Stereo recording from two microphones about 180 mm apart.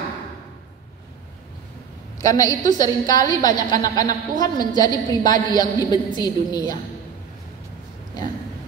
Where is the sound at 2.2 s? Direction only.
20° left (ahead or behind).